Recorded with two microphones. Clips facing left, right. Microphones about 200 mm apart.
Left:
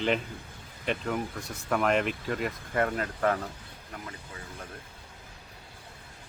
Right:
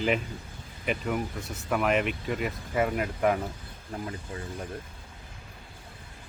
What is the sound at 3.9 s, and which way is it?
Speech, 30° right (ahead or behind).